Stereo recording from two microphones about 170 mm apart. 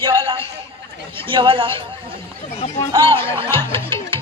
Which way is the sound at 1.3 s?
30° right (ahead or behind).